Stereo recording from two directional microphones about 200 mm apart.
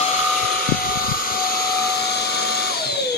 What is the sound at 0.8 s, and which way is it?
Vehicle, 45° left (ahead or behind).